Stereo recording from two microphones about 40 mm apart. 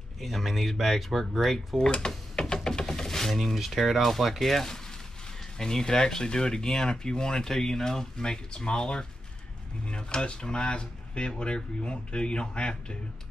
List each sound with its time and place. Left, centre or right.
0.2 s speech: centre
1.9 s speech: centre